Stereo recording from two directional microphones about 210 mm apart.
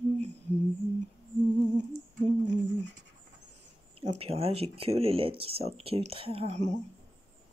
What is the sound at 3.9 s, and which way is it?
Speech, 25° right (ahead or behind).